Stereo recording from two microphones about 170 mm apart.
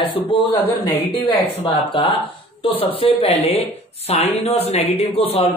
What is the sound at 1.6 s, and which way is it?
A woman's voice, 35° left (ahead or behind).